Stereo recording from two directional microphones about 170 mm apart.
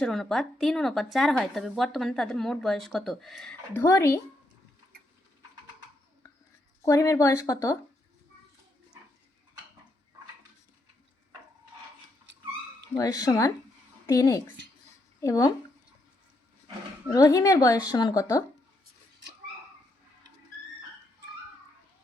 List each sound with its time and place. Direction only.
0.0 s speech: centre (ahead or behind)
6.8 s speech: 20° left (ahead or behind)
13.0 s speech: 20° left (ahead or behind)
17.1 s speech: 20° left (ahead or behind)